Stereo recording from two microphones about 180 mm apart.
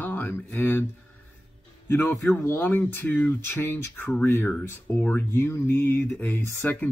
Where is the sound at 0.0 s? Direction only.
10° left (ahead or behind).